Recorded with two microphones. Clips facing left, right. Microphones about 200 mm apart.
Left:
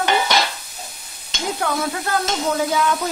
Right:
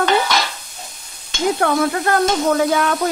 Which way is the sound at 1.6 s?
65° right (ahead or behind).